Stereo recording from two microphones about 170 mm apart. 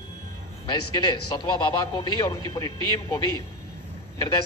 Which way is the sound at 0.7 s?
25° left (ahead or behind).